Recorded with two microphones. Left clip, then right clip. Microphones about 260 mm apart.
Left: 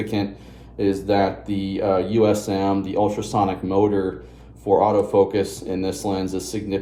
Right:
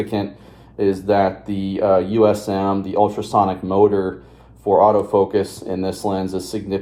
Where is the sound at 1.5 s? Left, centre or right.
Centre.